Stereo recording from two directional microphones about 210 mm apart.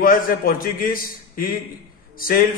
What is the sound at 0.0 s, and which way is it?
A man's voice, 40° left (ahead or behind).